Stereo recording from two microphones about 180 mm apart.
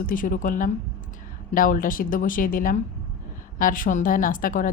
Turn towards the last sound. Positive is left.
turn(degrees=50)  # may be behind; listen again after turning